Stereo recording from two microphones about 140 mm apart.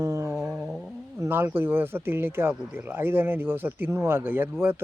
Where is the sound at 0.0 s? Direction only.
20° right (ahead or behind).